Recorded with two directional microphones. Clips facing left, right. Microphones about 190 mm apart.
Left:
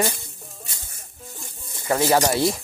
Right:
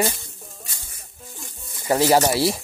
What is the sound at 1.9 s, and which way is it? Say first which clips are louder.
Speech: right 2 dB; 30° right (ahead or behind).